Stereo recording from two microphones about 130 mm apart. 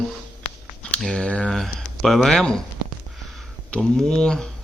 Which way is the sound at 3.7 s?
5° left (ahead or behind).